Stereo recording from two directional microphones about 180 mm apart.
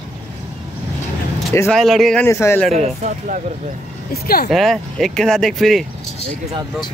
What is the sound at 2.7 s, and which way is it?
Speech, 40° right (ahead or behind).